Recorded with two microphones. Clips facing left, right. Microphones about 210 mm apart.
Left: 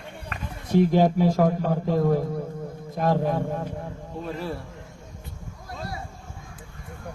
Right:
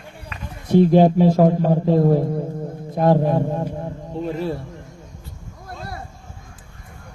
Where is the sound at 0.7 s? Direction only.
30° right (ahead or behind).